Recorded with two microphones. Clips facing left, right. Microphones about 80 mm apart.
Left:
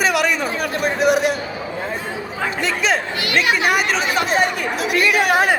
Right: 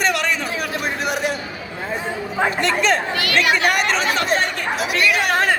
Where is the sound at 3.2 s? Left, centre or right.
Left.